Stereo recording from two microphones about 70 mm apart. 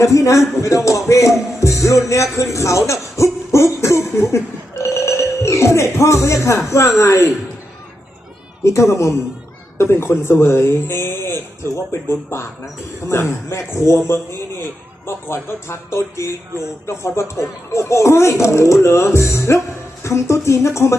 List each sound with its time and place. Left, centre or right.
0.0 s speech: left
3.5 s a sound: left
6.7 s speech: left
8.6 s a man's voice: left
15.0 s speech: left